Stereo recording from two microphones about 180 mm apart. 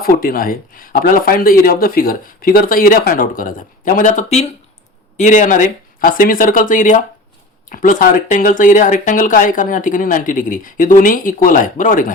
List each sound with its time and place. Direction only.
0.0 s speech: 55° left (ahead or behind)